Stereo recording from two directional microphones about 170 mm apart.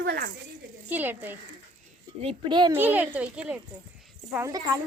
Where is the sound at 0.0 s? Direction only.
75° right (ahead or behind).